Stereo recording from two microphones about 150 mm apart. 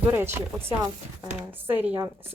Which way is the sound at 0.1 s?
15° right (ahead or behind).